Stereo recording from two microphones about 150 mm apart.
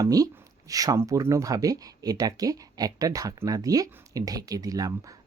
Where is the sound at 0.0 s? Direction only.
25° right (ahead or behind).